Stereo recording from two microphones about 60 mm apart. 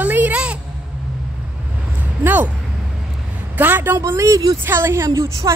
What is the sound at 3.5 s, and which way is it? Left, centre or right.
Speech, right.